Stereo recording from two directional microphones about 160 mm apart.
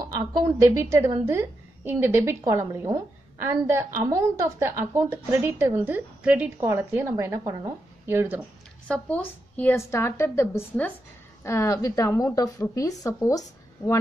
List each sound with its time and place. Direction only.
0.1 s a woman's voice: 20° right (ahead or behind)
8.8 s a woman's voice: 5° left (ahead or behind)